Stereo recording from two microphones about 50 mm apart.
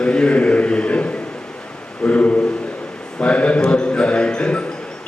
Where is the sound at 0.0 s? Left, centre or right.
Centre.